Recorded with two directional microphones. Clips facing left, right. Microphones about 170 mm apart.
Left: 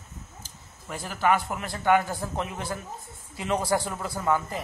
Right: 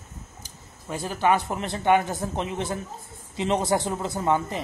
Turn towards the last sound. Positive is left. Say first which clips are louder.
# right 2 dB
turn(degrees=-25)  # may be behind; listen again after turning